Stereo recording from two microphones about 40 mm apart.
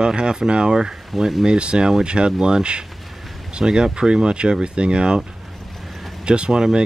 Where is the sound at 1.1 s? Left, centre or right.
Centre.